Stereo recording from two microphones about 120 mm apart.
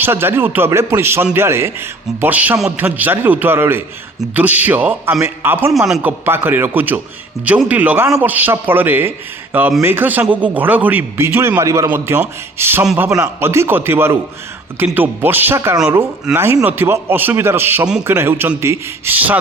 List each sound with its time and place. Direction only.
0.0 s a man's voice: 20° right (ahead or behind)
5.7 s speech: 5° right (ahead or behind)
6.0 s a man's voice: 15° right (ahead or behind)